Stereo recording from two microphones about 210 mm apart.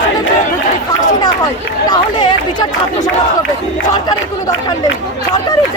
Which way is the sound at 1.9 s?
20° left (ahead or behind).